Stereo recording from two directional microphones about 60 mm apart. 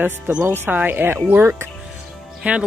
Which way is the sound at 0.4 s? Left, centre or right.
Right.